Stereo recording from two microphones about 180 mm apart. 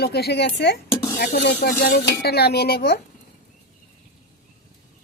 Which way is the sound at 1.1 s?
55° left (ahead or behind).